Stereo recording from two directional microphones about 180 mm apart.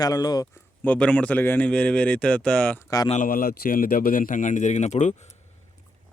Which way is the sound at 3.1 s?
50° left (ahead or behind).